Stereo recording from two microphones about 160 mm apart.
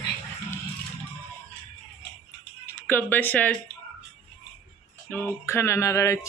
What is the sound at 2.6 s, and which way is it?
Speech, 10° left (ahead or behind).